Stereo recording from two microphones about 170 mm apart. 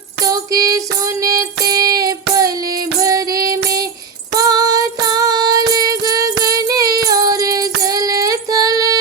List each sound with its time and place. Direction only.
0.3 s music: 20° right (ahead or behind)
1.4 s child singing: 20° right (ahead or behind)
4.4 s female singing: 20° right (ahead or behind)
5.7 s music: 25° right (ahead or behind)
6.4 s child singing: 20° right (ahead or behind)
7.1 s music: 20° right (ahead or behind)